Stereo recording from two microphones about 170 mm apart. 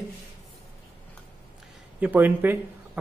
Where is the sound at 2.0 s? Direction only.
10° right (ahead or behind).